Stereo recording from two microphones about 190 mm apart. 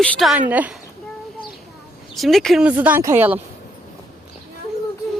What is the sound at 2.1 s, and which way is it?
Speech, centre (ahead or behind).